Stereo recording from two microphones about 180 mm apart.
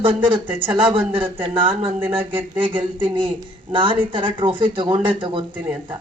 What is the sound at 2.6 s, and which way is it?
Speech, 25° right (ahead or behind).